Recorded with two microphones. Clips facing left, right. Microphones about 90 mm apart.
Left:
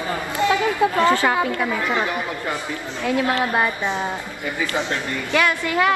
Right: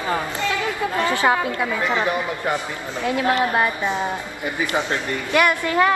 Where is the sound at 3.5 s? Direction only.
20° left (ahead or behind).